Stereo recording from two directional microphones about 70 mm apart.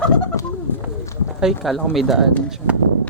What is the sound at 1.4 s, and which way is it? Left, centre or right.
Speech, centre.